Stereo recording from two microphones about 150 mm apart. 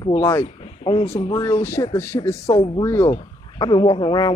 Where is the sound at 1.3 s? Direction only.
25° left (ahead or behind).